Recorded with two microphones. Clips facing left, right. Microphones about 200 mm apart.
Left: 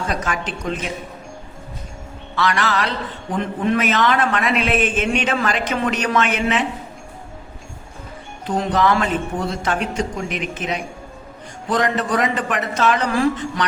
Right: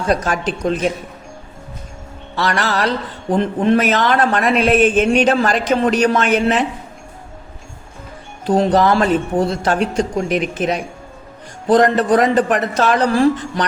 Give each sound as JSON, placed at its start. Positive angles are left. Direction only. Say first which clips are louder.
{"t": 0.1, "sound": "a man's voice", "louder": "right 6 dB", "side_deg": -35}
{"t": 2.3, "sound": "a man's voice", "louder": "right 1 dB", "side_deg": -35}
{"t": 8.4, "sound": "a man's voice", "louder": "right 5 dB", "side_deg": -35}